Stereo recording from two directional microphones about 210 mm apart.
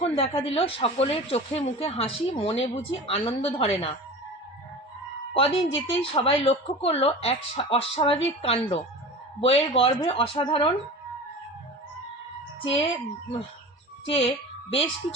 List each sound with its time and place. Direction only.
0.0 s speech: 25° left (ahead or behind)
5.3 s speech: 25° left (ahead or behind)
12.6 s speech: 25° left (ahead or behind)
14.1 s a woman's voice: 25° left (ahead or behind)